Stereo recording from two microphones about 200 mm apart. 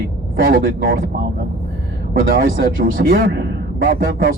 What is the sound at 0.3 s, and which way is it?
Speech, 45° right (ahead or behind).